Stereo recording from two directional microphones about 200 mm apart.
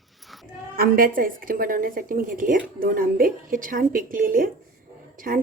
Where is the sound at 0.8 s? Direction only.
45° right (ahead or behind).